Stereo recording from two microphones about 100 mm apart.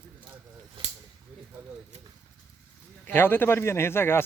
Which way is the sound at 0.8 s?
65° right (ahead or behind).